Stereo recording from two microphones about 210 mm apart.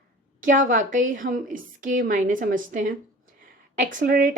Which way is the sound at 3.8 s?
40° right (ahead or behind).